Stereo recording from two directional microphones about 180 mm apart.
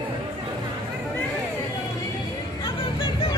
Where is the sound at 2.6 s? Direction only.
25° left (ahead or behind).